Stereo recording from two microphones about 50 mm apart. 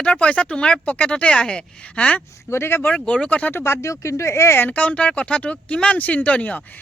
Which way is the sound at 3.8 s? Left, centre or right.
Left.